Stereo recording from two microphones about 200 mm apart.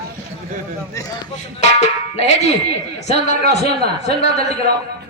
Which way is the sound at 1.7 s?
35° left (ahead or behind).